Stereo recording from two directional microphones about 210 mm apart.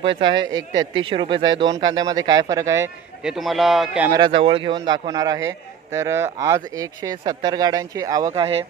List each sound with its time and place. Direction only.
0.1 s speech: 20° right (ahead or behind)
0.4 s speech: 65° right (ahead or behind)
1.0 s speech: 25° right (ahead or behind)
3.3 s speech: centre (ahead or behind)
4.1 s speech: 20° right (ahead or behind)